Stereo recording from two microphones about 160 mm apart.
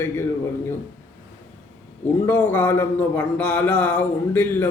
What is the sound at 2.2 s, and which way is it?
A man's voice, 15° left (ahead or behind).